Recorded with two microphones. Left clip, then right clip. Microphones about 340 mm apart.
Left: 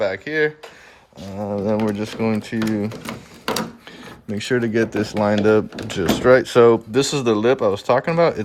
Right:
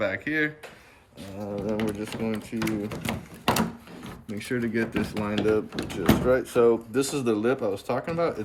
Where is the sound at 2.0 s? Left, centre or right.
Left.